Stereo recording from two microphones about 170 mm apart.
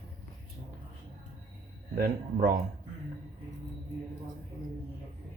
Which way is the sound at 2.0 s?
65° right (ahead or behind).